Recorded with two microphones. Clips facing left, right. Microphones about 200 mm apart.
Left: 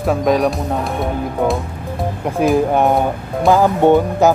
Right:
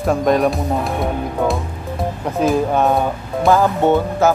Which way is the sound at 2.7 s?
15° left (ahead or behind).